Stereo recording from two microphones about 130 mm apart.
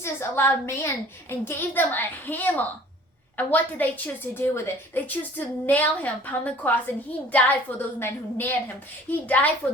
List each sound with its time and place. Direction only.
0.0 s a woman's voice: 20° left (ahead or behind)